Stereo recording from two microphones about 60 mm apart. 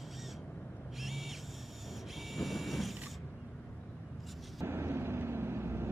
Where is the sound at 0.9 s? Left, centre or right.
Centre.